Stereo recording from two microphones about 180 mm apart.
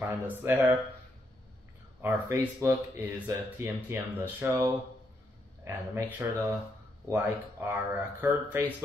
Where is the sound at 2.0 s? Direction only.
15° right (ahead or behind).